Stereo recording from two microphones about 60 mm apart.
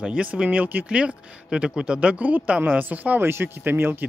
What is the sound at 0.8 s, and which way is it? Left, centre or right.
Speech, centre.